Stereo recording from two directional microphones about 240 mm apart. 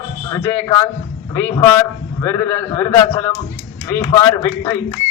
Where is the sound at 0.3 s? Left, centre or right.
Centre.